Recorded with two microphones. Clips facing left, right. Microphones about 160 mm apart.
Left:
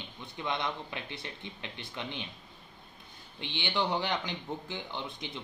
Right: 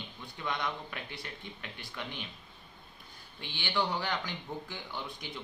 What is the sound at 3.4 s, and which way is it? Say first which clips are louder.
A man's voice: left 1 dB; 20° left (ahead or behind).